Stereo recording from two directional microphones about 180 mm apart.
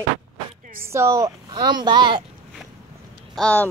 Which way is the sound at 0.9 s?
15° right (ahead or behind).